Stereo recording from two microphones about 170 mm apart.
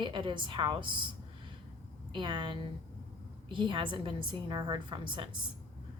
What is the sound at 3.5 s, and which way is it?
A woman's voice, 30° right (ahead or behind).